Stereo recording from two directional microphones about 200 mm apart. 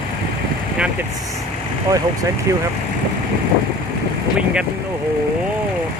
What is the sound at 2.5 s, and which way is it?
Speech, 15° right (ahead or behind).